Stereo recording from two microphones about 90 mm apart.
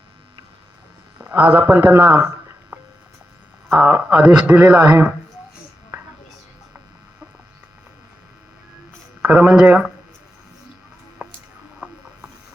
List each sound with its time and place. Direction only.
1.2 s speech: 20° right (ahead or behind)
9.2 s speech: 15° right (ahead or behind)
11.2 s a sound: 15° right (ahead or behind)
11.8 s mechanisms: 20° right (ahead or behind)